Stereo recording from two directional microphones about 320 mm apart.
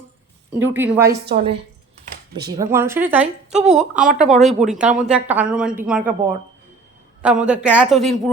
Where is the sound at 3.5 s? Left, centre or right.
Right.